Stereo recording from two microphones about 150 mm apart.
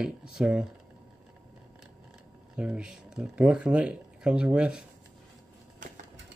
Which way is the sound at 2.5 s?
5° right (ahead or behind).